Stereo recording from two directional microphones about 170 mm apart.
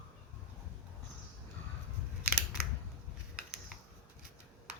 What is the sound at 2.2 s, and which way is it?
Scissors, 5° right (ahead or behind).